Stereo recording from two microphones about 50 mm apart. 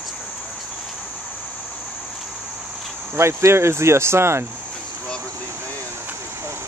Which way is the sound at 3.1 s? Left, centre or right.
Right.